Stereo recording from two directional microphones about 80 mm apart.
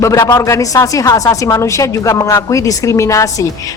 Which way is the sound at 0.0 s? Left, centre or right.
Left.